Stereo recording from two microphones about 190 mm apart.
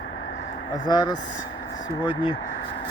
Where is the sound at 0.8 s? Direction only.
20° left (ahead or behind).